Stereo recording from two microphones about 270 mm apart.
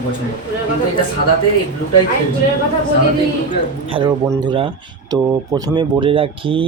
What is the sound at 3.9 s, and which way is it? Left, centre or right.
Speech, centre.